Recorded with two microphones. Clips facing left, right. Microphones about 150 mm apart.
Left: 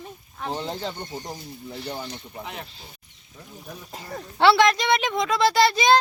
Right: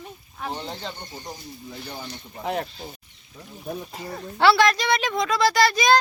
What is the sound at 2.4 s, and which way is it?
Speech, 45° right (ahead or behind).